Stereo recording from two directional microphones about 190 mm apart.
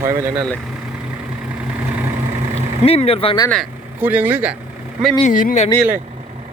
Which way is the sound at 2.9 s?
30° left (ahead or behind).